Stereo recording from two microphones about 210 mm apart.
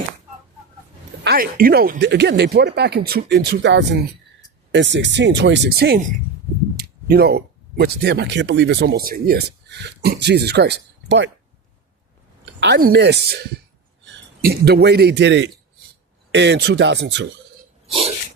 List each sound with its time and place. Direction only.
1.2 s speech: 45° right (ahead or behind)
12.5 s a man's voice: 50° right (ahead or behind)